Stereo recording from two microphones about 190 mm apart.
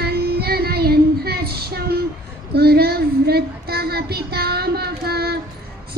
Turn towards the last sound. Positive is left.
turn(degrees=-55)  # may be behind; listen again after turning